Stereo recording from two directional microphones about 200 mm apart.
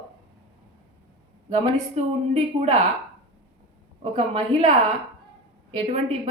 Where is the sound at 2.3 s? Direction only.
35° right (ahead or behind).